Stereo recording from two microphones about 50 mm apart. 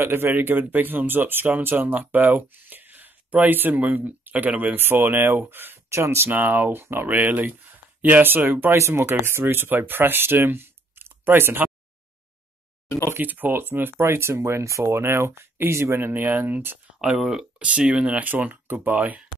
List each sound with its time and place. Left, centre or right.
0.0 s speech: right
4.7 s speech: right
5.9 s speech: right
6.3 s speech: right
7.1 s speech: right
8.7 s speech: right
9.2 s speech: right
13.2 s speech: right
14.0 s speech: right
15.0 s speech: right
17.0 s speech: centre
17.6 s speech: right